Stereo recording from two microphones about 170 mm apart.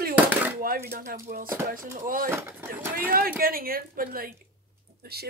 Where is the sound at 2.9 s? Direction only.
60° right (ahead or behind).